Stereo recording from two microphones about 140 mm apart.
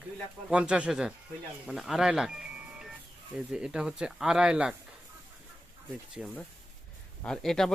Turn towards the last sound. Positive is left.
turn(degrees=5)  # may be behind; listen again after turning